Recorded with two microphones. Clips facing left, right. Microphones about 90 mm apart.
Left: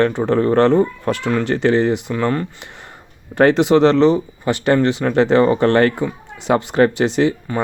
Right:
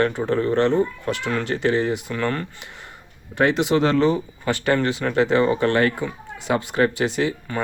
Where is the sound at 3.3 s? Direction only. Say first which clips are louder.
Left 6 dB; 35° left (ahead or behind).